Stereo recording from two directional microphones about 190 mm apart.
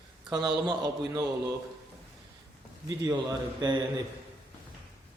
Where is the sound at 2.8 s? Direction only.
20° right (ahead or behind).